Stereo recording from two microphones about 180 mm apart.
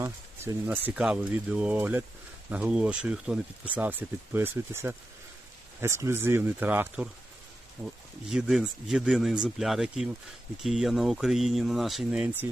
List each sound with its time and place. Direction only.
0.0 s speech: 10° right (ahead or behind)
8.3 s speech: centre (ahead or behind)